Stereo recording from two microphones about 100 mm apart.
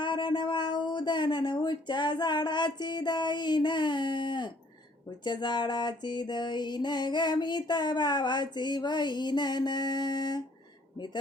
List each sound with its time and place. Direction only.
0.0 s speech: 50° left (ahead or behind)
5.2 s music: 50° left (ahead or behind)
10.9 s speech: 50° left (ahead or behind)